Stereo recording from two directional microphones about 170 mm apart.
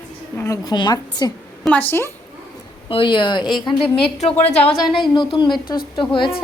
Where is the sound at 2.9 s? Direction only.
30° left (ahead or behind).